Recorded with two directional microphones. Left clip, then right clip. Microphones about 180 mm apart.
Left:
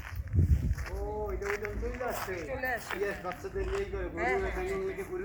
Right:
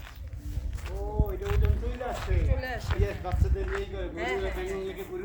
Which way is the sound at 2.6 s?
55° right (ahead or behind).